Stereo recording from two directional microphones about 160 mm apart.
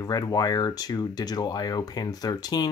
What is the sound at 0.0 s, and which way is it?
Speech, 25° left (ahead or behind).